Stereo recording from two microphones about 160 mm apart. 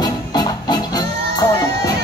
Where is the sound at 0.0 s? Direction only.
25° left (ahead or behind).